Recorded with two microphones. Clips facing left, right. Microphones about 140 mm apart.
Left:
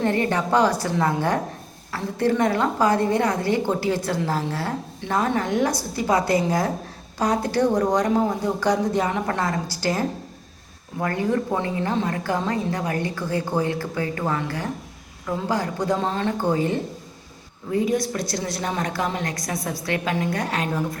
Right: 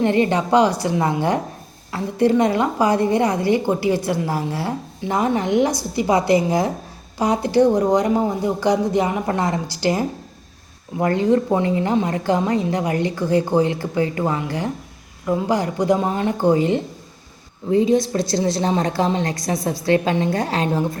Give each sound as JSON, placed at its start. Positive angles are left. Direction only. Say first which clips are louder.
{"t": 0.0, "sound": "a woman's voice", "louder": "right 4 dB", "side_deg": -20}